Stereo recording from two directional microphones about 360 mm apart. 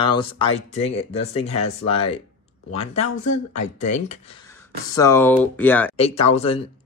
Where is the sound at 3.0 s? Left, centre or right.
Left.